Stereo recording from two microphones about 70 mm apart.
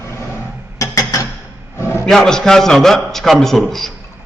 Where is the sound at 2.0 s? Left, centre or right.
Centre.